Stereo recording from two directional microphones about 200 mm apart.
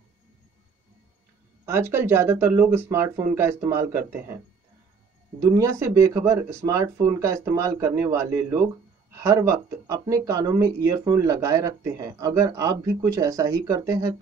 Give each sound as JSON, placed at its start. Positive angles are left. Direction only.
{"t": 1.7, "sound": "speech", "side_deg": -10}
{"t": 5.4, "sound": "speech", "side_deg": -15}